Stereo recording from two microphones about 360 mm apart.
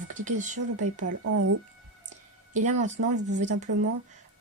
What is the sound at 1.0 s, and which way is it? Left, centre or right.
Speech, right.